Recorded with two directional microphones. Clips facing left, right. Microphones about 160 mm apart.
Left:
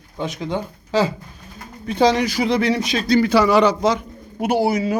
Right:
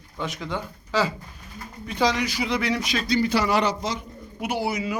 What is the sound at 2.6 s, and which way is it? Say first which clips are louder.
Speech: left 6 dB; 25° left (ahead or behind).